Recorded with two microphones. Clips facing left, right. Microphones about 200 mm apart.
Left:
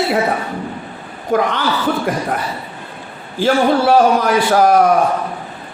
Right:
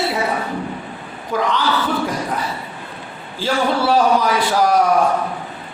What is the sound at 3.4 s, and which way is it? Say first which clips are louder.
A man's voice: left 5 dB; 55° left (ahead or behind).